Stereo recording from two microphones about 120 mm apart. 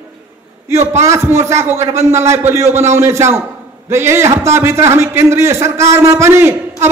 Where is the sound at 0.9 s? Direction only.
25° right (ahead or behind).